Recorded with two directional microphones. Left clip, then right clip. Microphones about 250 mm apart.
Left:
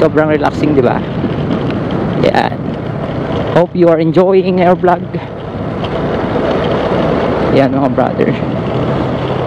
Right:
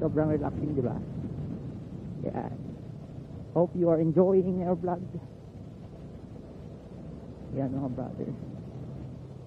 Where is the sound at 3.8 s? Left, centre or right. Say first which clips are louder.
Left 14 dB; centre.